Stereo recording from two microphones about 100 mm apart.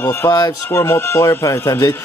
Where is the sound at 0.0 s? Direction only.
25° left (ahead or behind).